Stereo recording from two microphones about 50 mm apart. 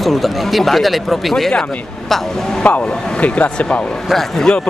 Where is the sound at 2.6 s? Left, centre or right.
Left.